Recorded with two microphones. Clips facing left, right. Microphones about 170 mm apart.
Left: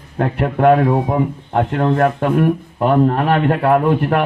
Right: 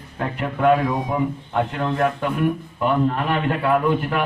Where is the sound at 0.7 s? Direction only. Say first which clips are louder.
Left 5 dB; 35° left (ahead or behind); by 2.5 s 55° left (ahead or behind).